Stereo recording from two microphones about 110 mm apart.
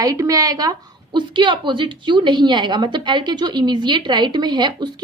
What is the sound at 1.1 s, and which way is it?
A woman's voice, 45° right (ahead or behind).